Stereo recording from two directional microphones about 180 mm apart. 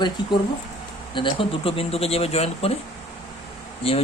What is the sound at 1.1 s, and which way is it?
Speech, 30° left (ahead or behind).